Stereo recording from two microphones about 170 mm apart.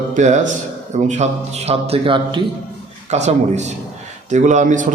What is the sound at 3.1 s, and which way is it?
A man's voice, 40° right (ahead or behind).